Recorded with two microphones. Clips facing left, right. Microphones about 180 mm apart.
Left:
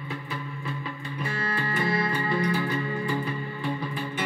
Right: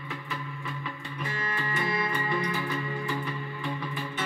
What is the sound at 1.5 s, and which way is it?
Music, 35° left (ahead or behind).